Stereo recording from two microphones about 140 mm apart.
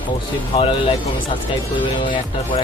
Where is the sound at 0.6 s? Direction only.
40° left (ahead or behind).